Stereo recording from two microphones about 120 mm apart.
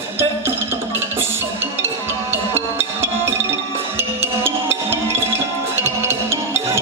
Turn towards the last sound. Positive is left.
turn(degrees=-20)  # may be behind; listen again after turning